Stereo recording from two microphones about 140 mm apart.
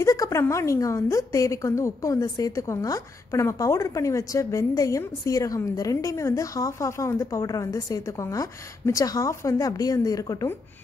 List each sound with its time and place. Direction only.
0.0 s a woman's voice: 25° left (ahead or behind)